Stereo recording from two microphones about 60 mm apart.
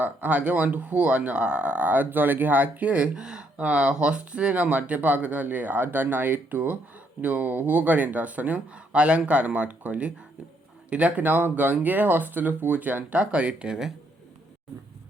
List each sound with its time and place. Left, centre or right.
0.0 s speech: right